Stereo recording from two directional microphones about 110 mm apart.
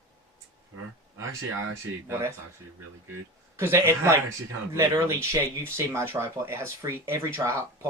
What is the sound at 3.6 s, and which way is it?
Speech, 25° right (ahead or behind).